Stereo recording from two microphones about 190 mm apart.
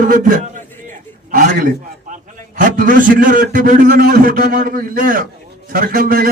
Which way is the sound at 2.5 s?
45° right (ahead or behind).